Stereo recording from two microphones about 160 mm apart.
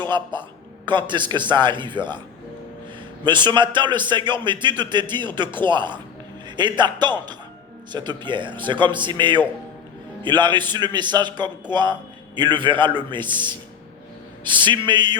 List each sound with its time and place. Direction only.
0.9 s a man's voice: 30° right (ahead or behind)
3.2 s a man's voice: 30° right (ahead or behind)